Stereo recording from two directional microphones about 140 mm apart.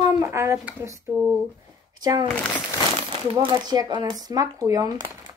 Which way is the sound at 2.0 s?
30° right (ahead or behind).